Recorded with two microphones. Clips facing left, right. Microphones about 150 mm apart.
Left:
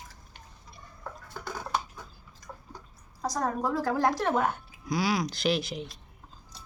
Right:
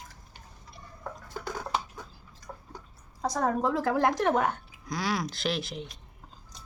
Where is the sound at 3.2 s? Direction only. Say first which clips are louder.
Right 2 dB; 25° right (ahead or behind).